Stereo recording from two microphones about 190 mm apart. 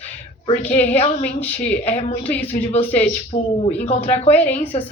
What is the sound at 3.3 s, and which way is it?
Speech, 35° left (ahead or behind).